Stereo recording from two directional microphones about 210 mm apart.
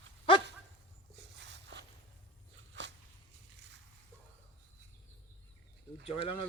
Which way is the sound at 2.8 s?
55° right (ahead or behind).